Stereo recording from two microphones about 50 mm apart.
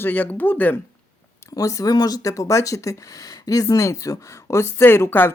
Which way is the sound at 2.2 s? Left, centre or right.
Left.